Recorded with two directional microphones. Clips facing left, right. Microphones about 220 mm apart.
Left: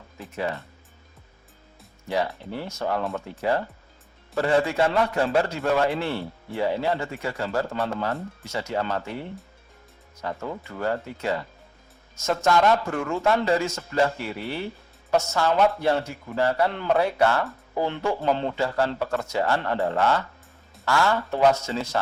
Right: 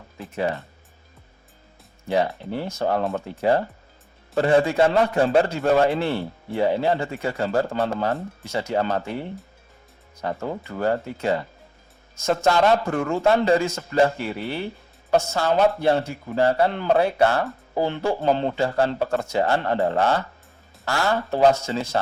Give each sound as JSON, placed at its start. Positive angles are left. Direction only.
{"t": 2.0, "sound": "a man's voice", "side_deg": -30}
{"t": 10.2, "sound": "a man's voice", "side_deg": -35}